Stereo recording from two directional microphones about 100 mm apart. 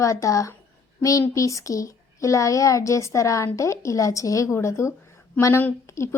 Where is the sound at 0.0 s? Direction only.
35° left (ahead or behind).